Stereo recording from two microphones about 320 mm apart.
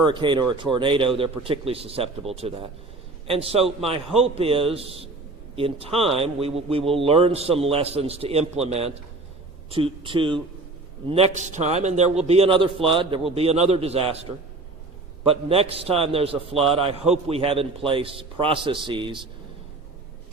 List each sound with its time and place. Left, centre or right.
0.0 s a man's voice: centre